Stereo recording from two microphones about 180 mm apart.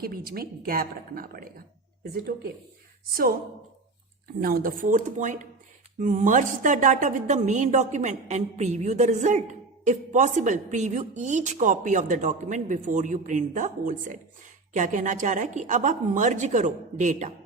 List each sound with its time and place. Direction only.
0.0 s a woman's voice: 55° right (ahead or behind)
3.1 s a woman's voice: 55° right (ahead or behind)
4.4 s a woman's voice: 55° right (ahead or behind)